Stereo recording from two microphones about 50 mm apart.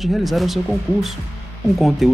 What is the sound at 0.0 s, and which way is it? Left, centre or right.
Speech, centre.